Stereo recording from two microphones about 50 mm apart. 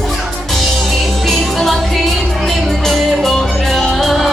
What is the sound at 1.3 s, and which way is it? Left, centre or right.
Music, centre.